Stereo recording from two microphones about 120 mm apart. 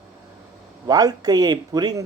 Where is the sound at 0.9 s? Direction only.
30° right (ahead or behind).